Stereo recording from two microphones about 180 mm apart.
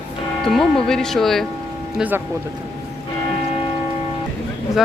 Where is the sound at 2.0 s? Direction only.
10° right (ahead or behind).